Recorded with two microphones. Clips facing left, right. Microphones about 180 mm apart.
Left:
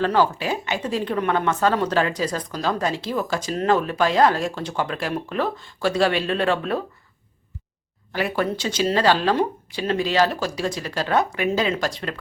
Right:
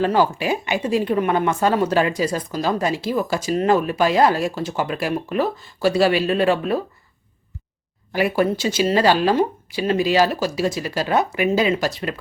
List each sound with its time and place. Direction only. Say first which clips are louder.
0.0 s a woman's voice: right 2 dB; 10° right (ahead or behind)
8.1 s a woman's voice: right 4 dB; 10° right (ahead or behind)